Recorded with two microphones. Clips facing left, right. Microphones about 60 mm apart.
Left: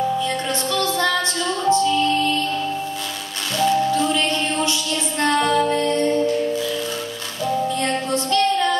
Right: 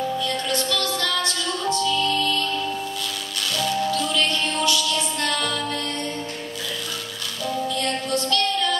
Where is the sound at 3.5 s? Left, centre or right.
Left.